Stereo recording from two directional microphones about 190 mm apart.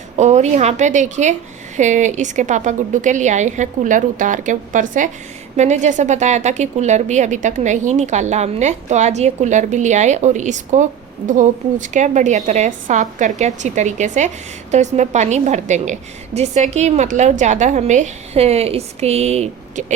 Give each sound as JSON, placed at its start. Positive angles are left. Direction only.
{"t": 0.2, "sound": "a woman's voice", "side_deg": -35}